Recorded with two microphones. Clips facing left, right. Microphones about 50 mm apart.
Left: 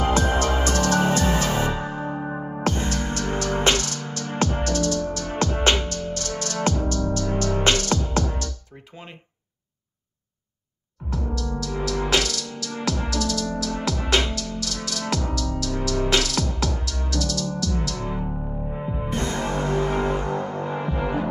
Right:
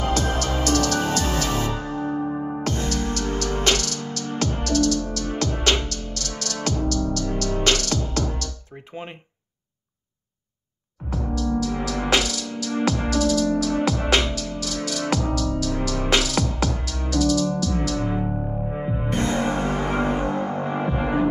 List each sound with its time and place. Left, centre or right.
0.0 s music: left
11.1 s music: centre